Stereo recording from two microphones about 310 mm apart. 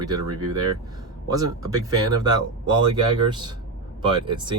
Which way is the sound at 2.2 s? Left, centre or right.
Centre.